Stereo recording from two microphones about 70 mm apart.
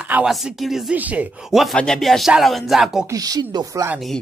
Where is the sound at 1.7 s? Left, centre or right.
Centre.